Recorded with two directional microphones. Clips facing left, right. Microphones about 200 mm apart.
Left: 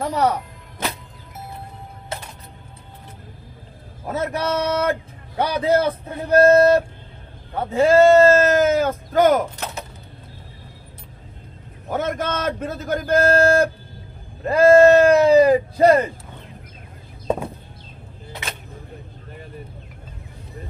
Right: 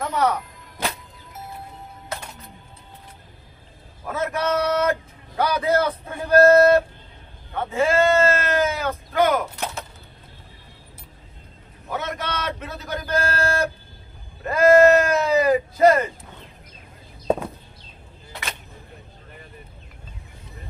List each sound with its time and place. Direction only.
0.0 s speech: 35° left (ahead or behind)
4.0 s a man's voice: 35° left (ahead or behind)
11.9 s a man's voice: 45° left (ahead or behind)
14.4 s speech: 30° left (ahead or behind)